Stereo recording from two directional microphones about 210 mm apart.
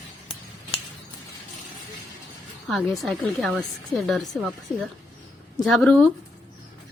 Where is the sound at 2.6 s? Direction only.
Centre (ahead or behind).